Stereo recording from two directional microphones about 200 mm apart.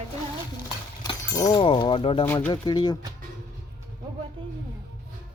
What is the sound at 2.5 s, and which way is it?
Speech, 20° left (ahead or behind).